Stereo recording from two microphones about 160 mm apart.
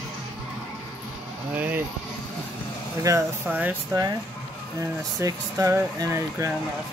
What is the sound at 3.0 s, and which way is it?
Speech, 15° right (ahead or behind).